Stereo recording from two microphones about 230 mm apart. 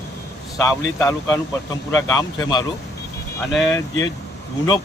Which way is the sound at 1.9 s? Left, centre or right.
Centre.